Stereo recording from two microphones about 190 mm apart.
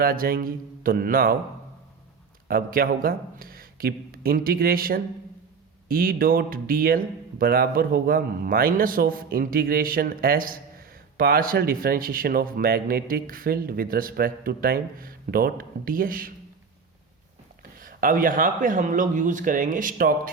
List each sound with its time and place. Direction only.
0.0 s speech: 50° right (ahead or behind)
2.5 s speech: 50° right (ahead or behind)
17.6 s speech: 45° right (ahead or behind)